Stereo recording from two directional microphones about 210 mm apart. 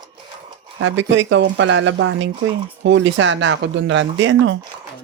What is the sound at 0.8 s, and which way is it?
Speech, 60° right (ahead or behind).